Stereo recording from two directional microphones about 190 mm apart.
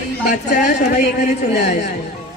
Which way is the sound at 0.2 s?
40° left (ahead or behind).